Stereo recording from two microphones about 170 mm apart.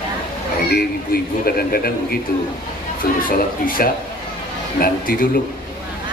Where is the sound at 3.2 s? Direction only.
55° left (ahead or behind).